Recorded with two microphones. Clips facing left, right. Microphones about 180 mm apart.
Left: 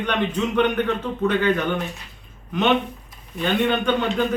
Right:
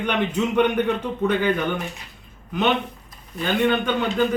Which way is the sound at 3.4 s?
Centre (ahead or behind).